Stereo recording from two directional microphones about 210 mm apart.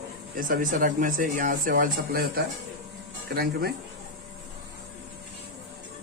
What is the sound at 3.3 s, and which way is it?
Speech, 50° right (ahead or behind).